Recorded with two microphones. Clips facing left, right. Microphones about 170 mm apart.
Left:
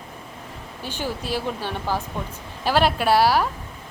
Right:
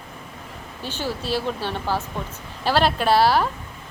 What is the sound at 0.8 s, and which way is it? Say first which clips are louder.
A woman's voice: right 1 dB; 15° left (ahead or behind).